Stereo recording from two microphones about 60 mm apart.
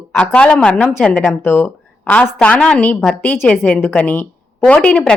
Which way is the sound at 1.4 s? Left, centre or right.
Left.